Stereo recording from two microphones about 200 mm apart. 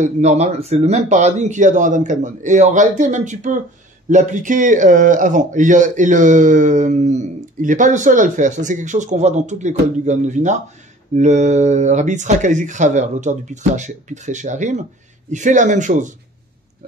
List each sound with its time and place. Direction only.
0.0 s speech: 35° right (ahead or behind)